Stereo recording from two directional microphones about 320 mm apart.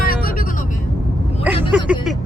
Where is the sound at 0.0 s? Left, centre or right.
Left.